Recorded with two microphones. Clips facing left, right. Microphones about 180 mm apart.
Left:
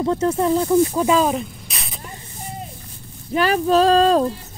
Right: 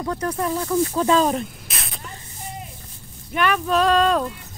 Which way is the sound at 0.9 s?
10° left (ahead or behind).